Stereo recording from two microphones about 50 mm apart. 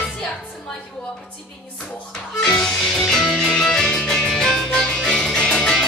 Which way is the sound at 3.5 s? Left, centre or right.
Centre.